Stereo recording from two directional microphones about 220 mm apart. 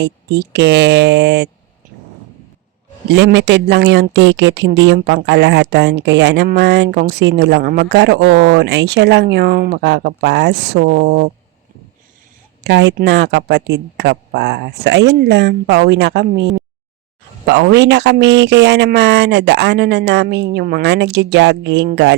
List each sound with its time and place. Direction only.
0.0 s speech: 50° right (ahead or behind)
3.1 s speech: 55° right (ahead or behind)
12.6 s speech: 50° right (ahead or behind)